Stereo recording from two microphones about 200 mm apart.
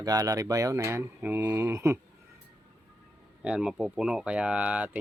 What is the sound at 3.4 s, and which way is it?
Speech, 5° right (ahead or behind).